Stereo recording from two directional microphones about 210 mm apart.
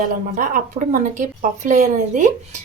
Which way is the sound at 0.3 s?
40° right (ahead or behind).